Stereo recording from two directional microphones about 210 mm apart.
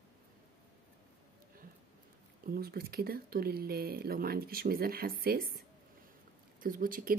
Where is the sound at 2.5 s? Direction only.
45° right (ahead or behind).